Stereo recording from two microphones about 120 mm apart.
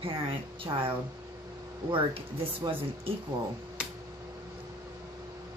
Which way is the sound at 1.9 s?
45° right (ahead or behind).